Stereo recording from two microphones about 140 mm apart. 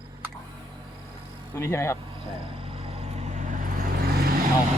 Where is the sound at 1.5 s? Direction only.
20° left (ahead or behind).